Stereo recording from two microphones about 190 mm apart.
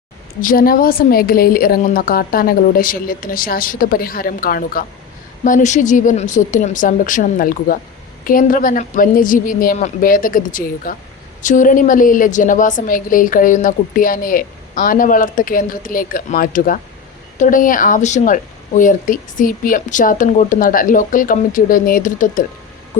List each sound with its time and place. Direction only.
0.4 s a woman's voice: 50° left (ahead or behind)